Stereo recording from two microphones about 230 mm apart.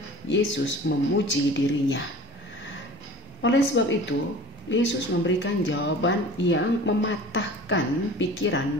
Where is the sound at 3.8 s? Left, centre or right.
Left.